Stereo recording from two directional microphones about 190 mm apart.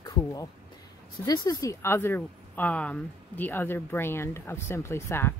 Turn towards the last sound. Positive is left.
turn(degrees=15)  # may be behind; listen again after turning